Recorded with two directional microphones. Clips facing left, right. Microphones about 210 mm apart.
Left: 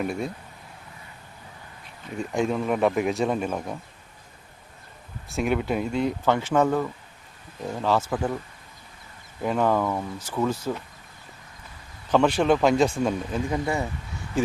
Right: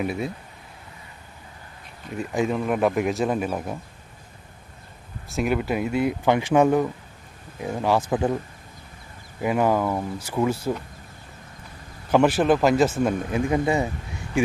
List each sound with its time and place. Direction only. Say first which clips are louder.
0.0 s speech: right 1 dB; 5° right (ahead or behind)
2.1 s speech: right 1 dB; centre (ahead or behind)
5.3 s speech: right 1 dB; centre (ahead or behind); by 8.4 s 20° right (ahead or behind)
9.4 s speech: right 2 dB; 10° right (ahead or behind)
12.1 s speech: right 2 dB; 5° right (ahead or behind)
13.5 s speech: right 5 dB; 20° right (ahead or behind)